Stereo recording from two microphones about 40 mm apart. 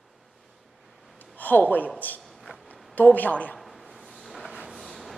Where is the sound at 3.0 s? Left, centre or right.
Left.